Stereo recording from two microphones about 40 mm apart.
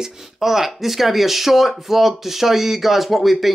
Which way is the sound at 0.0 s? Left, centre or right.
Centre.